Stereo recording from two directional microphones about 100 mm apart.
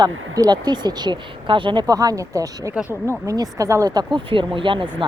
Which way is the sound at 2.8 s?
20° left (ahead or behind).